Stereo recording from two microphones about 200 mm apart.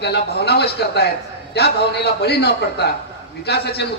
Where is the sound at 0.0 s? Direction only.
55° left (ahead or behind).